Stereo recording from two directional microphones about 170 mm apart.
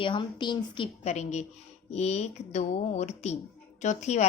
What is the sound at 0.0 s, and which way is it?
Speech, 30° left (ahead or behind).